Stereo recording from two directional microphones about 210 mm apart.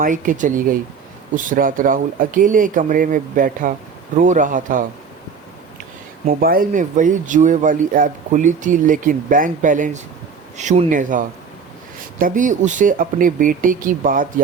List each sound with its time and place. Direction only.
0.0 s speech: 40° right (ahead or behind)
6.2 s speech: 45° right (ahead or behind)